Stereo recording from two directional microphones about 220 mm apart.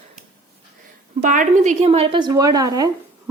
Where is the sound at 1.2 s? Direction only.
35° right (ahead or behind).